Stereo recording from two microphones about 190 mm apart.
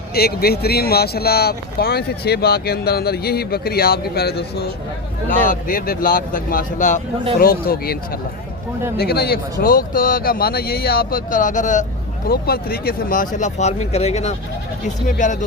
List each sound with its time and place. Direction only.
0.1 s speech: 55° left (ahead or behind)
5.5 s speech: 45° left (ahead or behind)
12.3 s speech: 55° left (ahead or behind)